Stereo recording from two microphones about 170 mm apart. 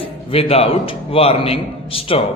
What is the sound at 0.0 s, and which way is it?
A man's voice, 35° left (ahead or behind).